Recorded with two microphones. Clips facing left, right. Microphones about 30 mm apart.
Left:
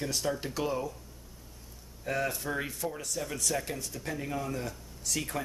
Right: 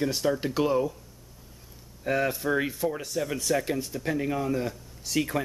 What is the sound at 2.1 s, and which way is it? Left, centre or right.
Speech, right.